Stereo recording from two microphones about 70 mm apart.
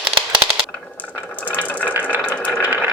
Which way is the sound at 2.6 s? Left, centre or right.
Right.